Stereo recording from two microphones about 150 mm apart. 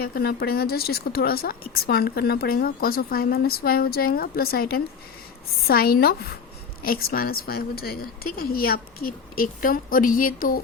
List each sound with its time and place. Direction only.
0.0 s speech: 90° left
6.8 s a woman's voice: 75° left (ahead or behind)